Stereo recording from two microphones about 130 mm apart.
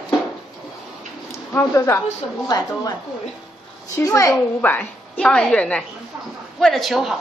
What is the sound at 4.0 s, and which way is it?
A woman's voice, 25° left (ahead or behind).